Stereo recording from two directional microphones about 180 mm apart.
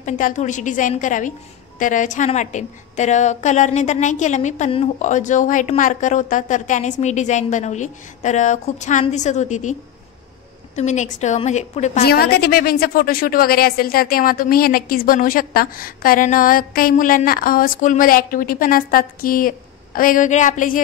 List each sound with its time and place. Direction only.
0.0 s a woman's voice: 45° left (ahead or behind)
10.8 s a woman's voice: 40° left (ahead or behind)
12.0 s a woman's voice: 60° left (ahead or behind)